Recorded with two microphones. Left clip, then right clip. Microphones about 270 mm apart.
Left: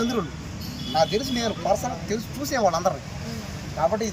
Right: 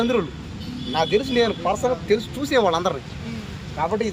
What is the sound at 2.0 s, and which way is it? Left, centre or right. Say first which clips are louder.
Speech: right 7 dB; right.